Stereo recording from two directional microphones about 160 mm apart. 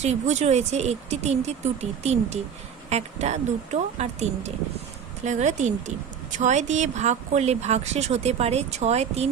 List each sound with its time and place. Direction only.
0.0 s speech: 45° right (ahead or behind)